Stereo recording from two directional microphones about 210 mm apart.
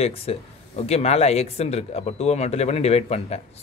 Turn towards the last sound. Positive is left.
turn(degrees=30)  # may be behind; listen again after turning